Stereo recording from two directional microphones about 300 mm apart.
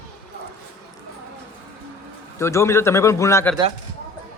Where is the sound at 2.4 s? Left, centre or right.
Centre.